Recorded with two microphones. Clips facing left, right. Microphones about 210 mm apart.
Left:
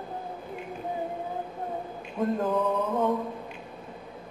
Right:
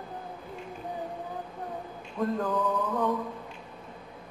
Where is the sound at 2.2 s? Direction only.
25° left (ahead or behind).